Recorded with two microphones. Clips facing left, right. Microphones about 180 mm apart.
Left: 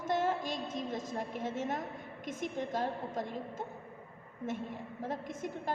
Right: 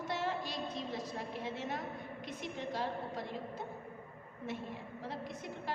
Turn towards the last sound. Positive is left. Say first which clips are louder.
# left 5 dB
turn(degrees=45)  # may be behind; listen again after turning